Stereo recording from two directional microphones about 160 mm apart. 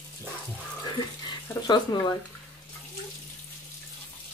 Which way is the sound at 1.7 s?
25° left (ahead or behind).